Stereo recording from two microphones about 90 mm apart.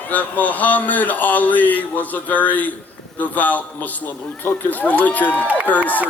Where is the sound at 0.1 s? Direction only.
20° left (ahead or behind).